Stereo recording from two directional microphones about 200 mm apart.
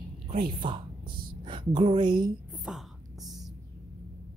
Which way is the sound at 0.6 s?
25° right (ahead or behind).